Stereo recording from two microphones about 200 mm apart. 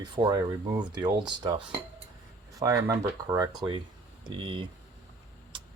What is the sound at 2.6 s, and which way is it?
Speech, 15° right (ahead or behind).